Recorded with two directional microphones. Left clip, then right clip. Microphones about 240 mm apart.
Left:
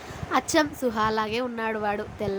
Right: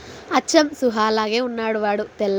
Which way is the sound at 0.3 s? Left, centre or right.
Centre.